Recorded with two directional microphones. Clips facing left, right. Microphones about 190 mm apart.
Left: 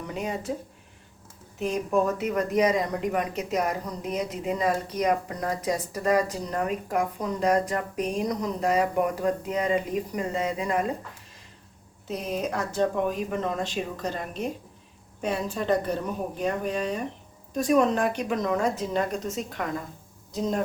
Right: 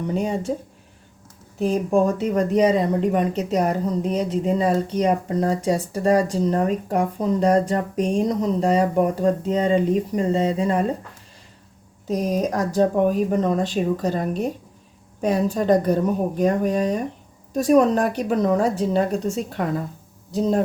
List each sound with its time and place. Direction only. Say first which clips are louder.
0.1 s a woman's voice: right 6 dB; 35° right (ahead or behind)
1.5 s a woman's voice: right 6 dB; 35° right (ahead or behind)
12.0 s a woman's voice: right 7 dB; 40° right (ahead or behind)